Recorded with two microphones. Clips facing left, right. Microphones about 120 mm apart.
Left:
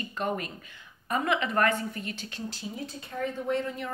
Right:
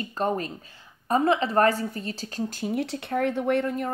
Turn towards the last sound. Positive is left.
turn(degrees=-55)  # may be behind; listen again after turning